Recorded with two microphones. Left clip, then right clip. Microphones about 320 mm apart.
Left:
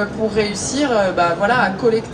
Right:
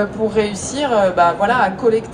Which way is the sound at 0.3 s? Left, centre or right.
Right.